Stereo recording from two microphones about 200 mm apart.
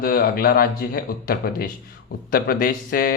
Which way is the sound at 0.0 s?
50° left (ahead or behind).